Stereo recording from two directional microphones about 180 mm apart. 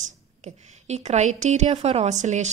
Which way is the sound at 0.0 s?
40° right (ahead or behind).